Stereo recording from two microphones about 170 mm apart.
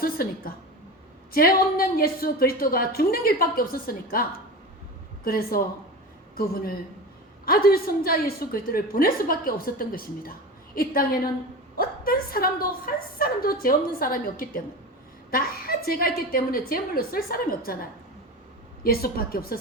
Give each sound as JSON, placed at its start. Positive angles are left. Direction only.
{"t": 0.0, "sound": "a sound", "side_deg": 60}
{"t": 1.3, "sound": "a woman's voice", "side_deg": 60}
{"t": 18.8, "sound": "a woman's voice", "side_deg": 60}